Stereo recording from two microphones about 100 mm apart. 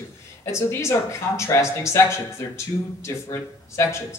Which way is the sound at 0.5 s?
30° left (ahead or behind).